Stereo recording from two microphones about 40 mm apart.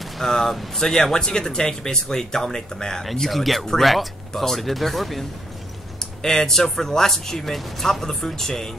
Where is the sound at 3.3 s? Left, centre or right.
Centre.